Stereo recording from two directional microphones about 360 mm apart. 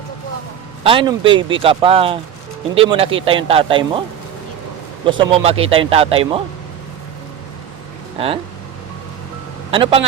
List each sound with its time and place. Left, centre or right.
0.9 s speech: centre
5.0 s speech: centre
9.7 s speech: centre